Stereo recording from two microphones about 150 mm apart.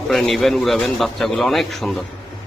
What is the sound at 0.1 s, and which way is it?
A man's voice, centre (ahead or behind).